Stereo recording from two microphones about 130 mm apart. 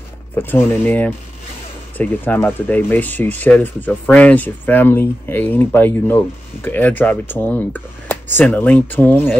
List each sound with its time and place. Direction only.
0.4 s speech: 15° left (ahead or behind)